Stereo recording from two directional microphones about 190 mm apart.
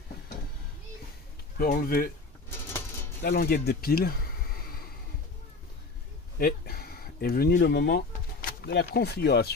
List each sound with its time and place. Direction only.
1.6 s speech: 50° left (ahead or behind)
2.6 s music: 15° left (ahead or behind)
3.2 s speech: 55° left (ahead or behind)
6.3 s speech: 50° left (ahead or behind)